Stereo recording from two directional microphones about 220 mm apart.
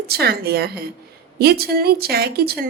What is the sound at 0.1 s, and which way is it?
A woman's voice, 45° right (ahead or behind).